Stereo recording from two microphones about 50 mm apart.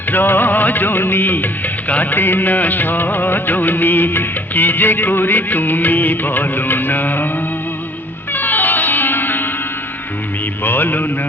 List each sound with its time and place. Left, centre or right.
0.1 s music of bollywood: left
8.3 s music: left
10.6 s music: left